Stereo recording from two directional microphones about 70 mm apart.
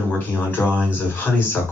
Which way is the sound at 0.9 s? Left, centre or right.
Left.